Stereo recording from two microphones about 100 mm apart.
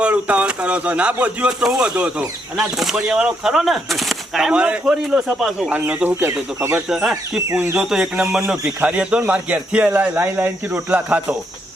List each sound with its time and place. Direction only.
0.0 s speech: 15° right (ahead or behind)
6.8 s speech: 5° right (ahead or behind)
7.3 s speech: 15° right (ahead or behind)
7.8 s speech: 5° right (ahead or behind)